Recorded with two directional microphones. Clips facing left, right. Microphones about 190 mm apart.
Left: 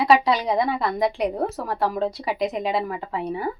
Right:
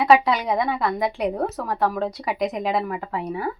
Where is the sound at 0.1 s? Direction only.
35° left (ahead or behind).